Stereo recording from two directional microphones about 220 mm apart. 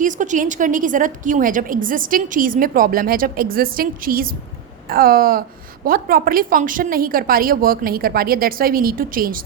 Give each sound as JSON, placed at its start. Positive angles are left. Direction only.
{"t": 0.0, "sound": "a woman's voice", "side_deg": -35}